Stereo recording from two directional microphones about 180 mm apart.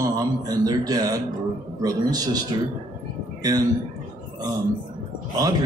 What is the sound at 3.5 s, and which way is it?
Speech, 20° right (ahead or behind).